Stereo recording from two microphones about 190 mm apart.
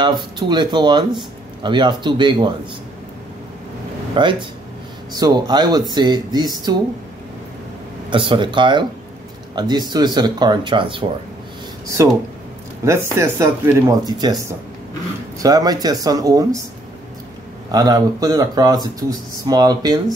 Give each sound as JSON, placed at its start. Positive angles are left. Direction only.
{"t": 0.0, "sound": "speech", "side_deg": -25}
{"t": 4.1, "sound": "speech", "side_deg": -25}
{"t": 8.1, "sound": "speech", "side_deg": -25}
{"t": 12.0, "sound": "speech", "side_deg": -15}
{"t": 17.6, "sound": "speech", "side_deg": -20}